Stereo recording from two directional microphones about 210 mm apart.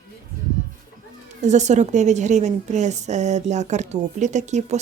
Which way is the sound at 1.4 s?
35° right (ahead or behind).